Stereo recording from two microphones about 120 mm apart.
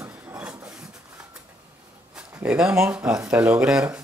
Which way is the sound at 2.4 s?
5° right (ahead or behind).